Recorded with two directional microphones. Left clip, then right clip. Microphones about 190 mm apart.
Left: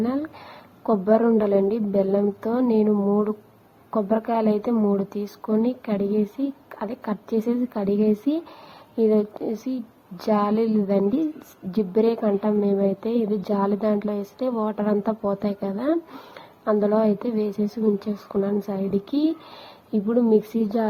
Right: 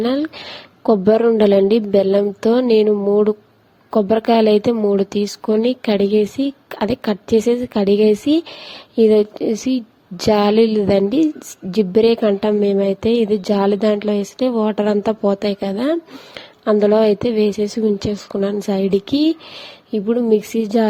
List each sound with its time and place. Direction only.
0.0 s a woman's voice: 55° right (ahead or behind)